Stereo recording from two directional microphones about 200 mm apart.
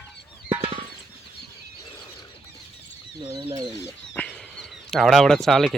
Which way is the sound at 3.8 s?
10° left (ahead or behind).